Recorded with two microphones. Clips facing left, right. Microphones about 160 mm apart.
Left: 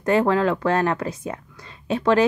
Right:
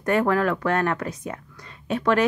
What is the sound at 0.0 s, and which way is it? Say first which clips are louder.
Speech: left 2 dB; 25° left (ahead or behind).